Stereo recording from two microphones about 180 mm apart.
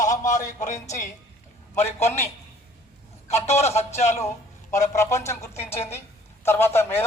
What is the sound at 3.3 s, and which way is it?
Speech, 35° left (ahead or behind).